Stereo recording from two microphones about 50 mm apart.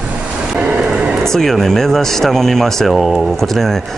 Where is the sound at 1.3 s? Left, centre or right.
Centre.